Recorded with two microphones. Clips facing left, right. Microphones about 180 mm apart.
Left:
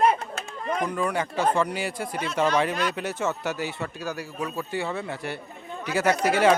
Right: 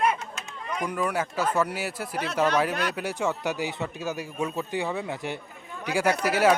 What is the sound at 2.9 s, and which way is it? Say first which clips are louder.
Speech: even; 10° right (ahead or behind).